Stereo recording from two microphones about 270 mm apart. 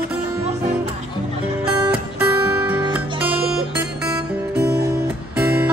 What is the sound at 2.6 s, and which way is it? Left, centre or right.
Guitar, centre.